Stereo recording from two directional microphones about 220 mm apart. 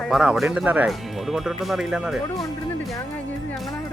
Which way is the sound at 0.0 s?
Centre (ahead or behind).